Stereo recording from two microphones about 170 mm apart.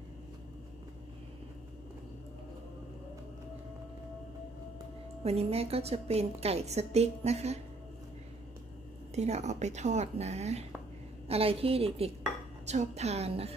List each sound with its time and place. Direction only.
5.2 s a woman's voice: 35° right (ahead or behind)
9.1 s a woman's voice: 40° right (ahead or behind)